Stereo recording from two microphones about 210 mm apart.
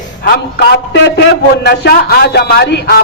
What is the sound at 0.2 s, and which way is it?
A man's voice, 50° left (ahead or behind).